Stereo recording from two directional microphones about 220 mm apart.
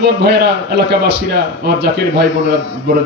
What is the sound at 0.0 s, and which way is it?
A man's voice, 50° right (ahead or behind).